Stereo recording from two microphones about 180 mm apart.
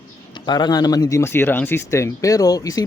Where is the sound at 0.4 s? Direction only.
25° left (ahead or behind).